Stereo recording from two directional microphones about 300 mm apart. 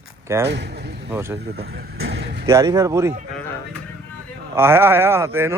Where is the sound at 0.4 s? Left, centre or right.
Right.